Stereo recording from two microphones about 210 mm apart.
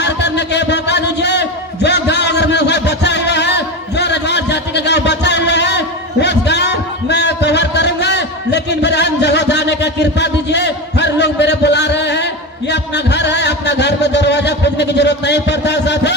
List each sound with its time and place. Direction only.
0.0 s crowd: 55° left (ahead or behind)